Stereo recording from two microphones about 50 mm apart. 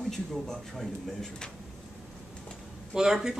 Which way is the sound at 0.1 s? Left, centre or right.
Centre.